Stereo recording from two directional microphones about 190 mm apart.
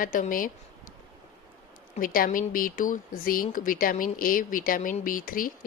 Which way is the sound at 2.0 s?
45° left (ahead or behind).